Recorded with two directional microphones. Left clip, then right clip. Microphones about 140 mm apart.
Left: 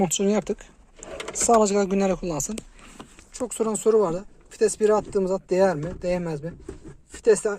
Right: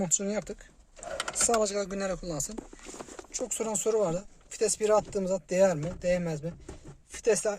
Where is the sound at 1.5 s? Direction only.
15° left (ahead or behind).